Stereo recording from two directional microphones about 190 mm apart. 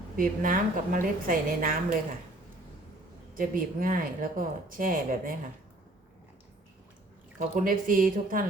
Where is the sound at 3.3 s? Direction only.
50° right (ahead or behind).